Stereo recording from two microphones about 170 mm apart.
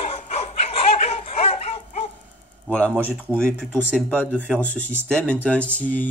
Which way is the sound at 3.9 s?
10° left (ahead or behind).